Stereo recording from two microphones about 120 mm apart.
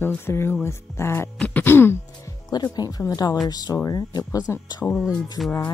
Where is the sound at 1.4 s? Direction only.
15° left (ahead or behind).